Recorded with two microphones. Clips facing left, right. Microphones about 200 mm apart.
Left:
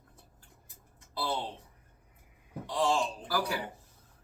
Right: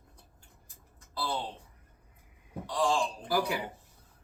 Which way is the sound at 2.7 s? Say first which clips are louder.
Even; 25° left (ahead or behind).